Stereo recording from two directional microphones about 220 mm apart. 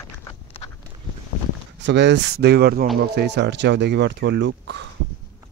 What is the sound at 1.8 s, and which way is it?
Speech, 50° right (ahead or behind).